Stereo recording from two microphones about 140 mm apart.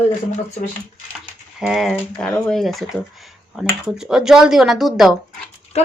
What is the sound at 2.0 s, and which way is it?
Speech, 10° left (ahead or behind).